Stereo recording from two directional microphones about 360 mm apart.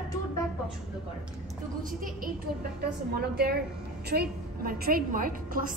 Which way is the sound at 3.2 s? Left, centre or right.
Right.